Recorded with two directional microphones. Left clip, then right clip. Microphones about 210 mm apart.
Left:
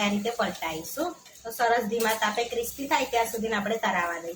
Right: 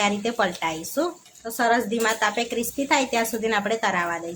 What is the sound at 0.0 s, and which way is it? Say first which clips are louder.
Speech: right 5 dB; 50° right (ahead or behind).